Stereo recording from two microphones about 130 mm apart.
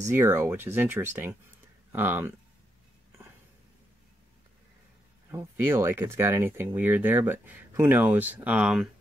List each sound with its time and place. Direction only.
0.1 s speech: 20° right (ahead or behind)
5.3 s speech: 20° right (ahead or behind)